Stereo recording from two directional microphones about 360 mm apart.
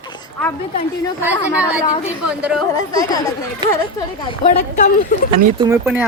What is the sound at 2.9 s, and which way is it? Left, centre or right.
A woman's voice, centre.